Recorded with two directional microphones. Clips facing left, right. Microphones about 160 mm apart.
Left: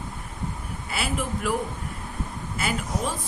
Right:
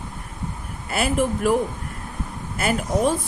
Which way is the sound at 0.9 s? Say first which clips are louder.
Right 8 dB; 50° right (ahead or behind).